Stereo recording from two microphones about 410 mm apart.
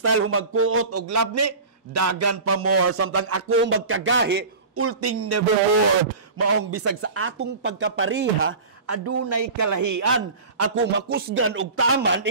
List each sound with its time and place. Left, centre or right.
0.0 s a man's voice: right
6.4 s a man's voice: right
8.8 s a man's voice: right